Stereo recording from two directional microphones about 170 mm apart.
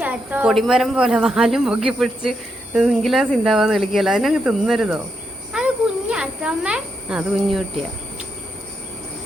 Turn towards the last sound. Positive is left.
turn(degrees=-5)  # may be behind; listen again after turning